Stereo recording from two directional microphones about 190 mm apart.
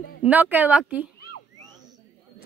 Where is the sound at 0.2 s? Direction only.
10° right (ahead or behind).